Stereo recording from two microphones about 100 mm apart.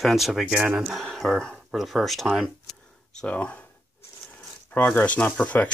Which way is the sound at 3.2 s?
10° left (ahead or behind).